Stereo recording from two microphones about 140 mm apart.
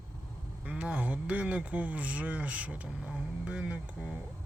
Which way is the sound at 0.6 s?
10° right (ahead or behind).